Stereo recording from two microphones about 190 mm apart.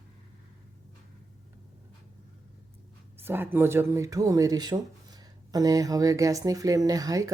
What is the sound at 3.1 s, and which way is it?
Speech, 10° right (ahead or behind).